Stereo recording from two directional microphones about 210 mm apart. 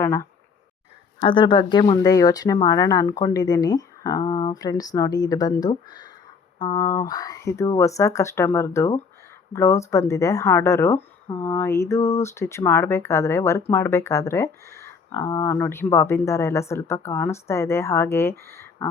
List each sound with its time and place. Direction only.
0.0 s speech: 15° left (ahead or behind)